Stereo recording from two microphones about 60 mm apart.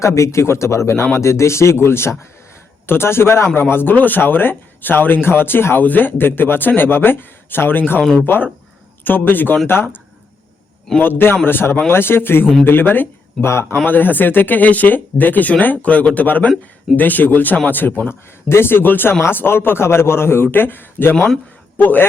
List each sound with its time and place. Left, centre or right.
0.0 s speech: left
9.0 s speech: left
11.0 s speech: left
13.4 s speech: left
13.8 s a man's voice: left